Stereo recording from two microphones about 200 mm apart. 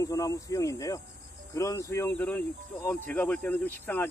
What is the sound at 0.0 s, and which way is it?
Speech, 15° left (ahead or behind).